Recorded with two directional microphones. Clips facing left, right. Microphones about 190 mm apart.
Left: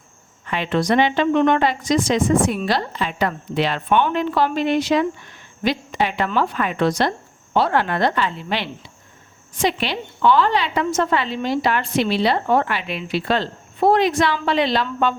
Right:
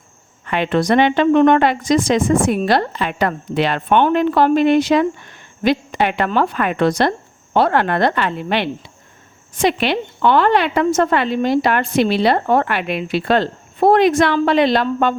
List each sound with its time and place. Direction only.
0.4 s a woman's voice: 55° right (ahead or behind)